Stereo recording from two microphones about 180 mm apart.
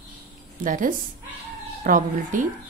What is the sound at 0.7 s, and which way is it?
A woman's voice, 50° right (ahead or behind).